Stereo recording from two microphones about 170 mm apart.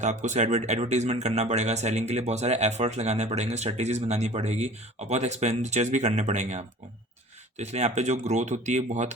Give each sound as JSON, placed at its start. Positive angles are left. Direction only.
{"t": 0.0, "sound": "speech", "side_deg": -45}